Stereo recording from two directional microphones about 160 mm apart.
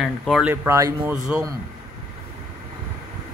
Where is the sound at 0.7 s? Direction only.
20° right (ahead or behind).